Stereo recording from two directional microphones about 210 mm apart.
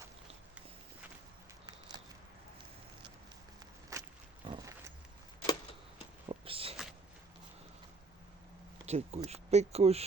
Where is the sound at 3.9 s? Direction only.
15° right (ahead or behind).